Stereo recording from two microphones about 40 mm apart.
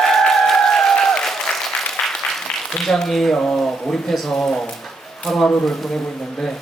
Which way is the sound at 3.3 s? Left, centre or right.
Centre.